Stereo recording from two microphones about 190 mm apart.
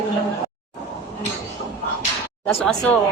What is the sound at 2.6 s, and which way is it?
Speech, 5° left (ahead or behind).